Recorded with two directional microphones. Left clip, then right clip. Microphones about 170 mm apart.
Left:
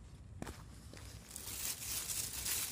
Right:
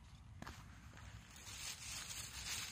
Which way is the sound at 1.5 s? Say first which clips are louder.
Left 4 dB; 65° left (ahead or behind).